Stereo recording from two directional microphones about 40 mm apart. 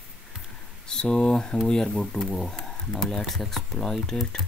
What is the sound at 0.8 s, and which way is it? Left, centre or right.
Speech, centre.